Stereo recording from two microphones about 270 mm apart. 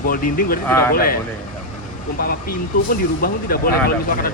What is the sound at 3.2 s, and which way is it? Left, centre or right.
Speech, left.